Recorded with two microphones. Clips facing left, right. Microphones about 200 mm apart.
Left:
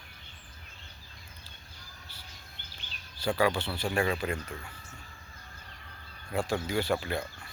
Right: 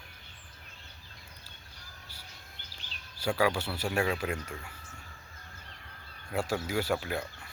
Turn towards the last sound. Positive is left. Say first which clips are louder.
# left 1 dB
turn(degrees=-5)  # may be behind; listen again after turning